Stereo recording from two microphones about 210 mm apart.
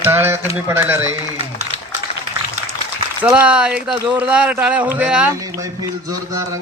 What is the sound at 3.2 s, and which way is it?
Speech, 5° right (ahead or behind).